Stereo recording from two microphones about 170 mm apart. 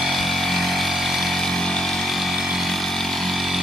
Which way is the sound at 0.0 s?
Centre (ahead or behind).